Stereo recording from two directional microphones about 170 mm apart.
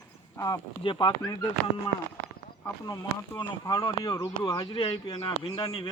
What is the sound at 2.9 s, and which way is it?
Speech, 20° left (ahead or behind).